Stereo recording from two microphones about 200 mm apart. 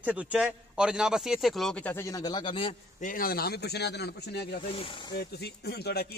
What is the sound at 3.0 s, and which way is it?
A man's voice, 45° left (ahead or behind).